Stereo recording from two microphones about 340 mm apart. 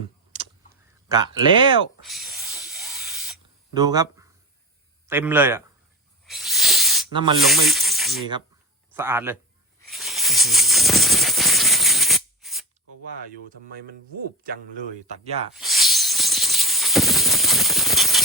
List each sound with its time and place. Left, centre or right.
1.0 s a man's voice: centre
2.0 s a sound: centre
3.8 s a man's voice: centre
6.2 s snake: centre
7.1 s a man's voice: centre
7.3 s a man's voice: centre
9.9 s music: centre
15.0 s speech: centre
15.5 s a sound: centre